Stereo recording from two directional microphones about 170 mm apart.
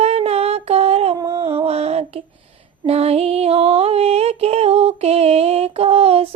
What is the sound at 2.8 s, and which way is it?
Music, 35° right (ahead or behind).